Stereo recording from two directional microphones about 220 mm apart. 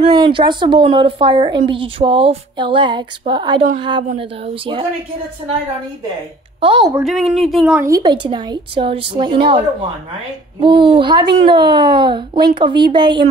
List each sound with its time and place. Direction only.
0.1 s a woman's voice: 20° right (ahead or behind)
6.6 s a woman's voice: 20° right (ahead or behind)
7.0 s speech: centre (ahead or behind)
7.8 s a woman's voice: 15° right (ahead or behind)
10.6 s a woman's voice: 20° right (ahead or behind)